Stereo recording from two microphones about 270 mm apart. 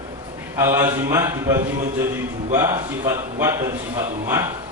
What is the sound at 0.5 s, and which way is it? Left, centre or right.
A man's voice, centre.